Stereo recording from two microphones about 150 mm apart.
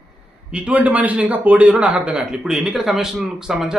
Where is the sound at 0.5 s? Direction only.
10° right (ahead or behind).